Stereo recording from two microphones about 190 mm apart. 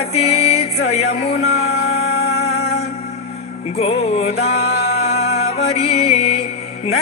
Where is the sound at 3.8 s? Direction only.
35° left (ahead or behind).